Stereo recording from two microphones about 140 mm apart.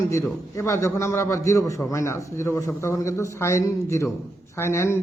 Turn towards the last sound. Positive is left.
turn(degrees=20)  # may be behind; listen again after turning